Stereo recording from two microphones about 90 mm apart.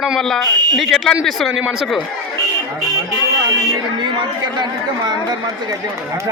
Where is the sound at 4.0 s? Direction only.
55° right (ahead or behind).